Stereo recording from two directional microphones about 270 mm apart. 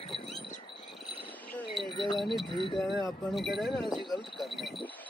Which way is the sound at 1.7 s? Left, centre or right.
Centre.